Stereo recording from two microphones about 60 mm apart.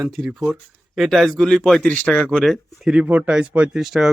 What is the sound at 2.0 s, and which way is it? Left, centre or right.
Speech, left.